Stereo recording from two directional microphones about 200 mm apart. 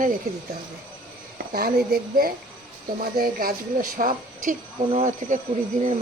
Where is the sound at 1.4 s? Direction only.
50° right (ahead or behind).